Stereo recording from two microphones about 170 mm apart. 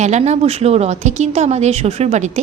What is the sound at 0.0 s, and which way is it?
A woman's voice, 40° right (ahead or behind).